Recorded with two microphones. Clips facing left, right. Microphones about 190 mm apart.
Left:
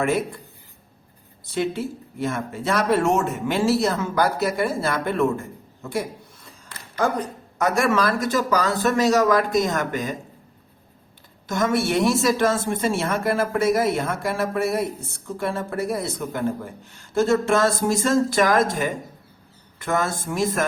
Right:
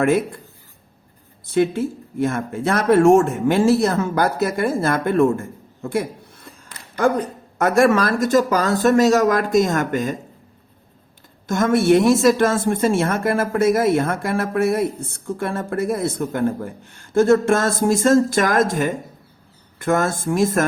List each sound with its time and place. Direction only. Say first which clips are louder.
1.5 s a woman's voice: right 6 dB; 50° right (ahead or behind)
7.6 s a woman's voice: right 5 dB; 55° right (ahead or behind)
11.4 s a woman's voice: right 6 dB; 50° right (ahead or behind)